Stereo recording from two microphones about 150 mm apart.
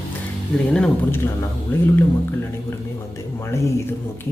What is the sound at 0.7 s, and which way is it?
Speech, 10° left (ahead or behind).